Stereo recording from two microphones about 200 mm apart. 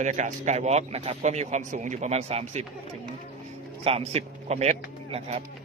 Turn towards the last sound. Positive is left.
turn(degrees=-30)  # may be behind; listen again after turning